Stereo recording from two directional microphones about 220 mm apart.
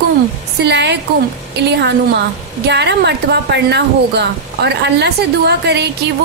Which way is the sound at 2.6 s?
50° right (ahead or behind).